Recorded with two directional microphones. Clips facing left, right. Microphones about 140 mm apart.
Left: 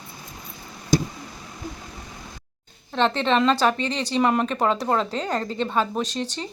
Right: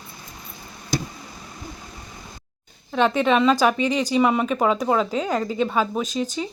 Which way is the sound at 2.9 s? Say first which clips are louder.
Right 2 dB; 10° right (ahead or behind).